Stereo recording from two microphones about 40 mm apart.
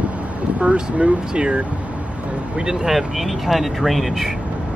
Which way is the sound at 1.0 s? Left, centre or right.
Right.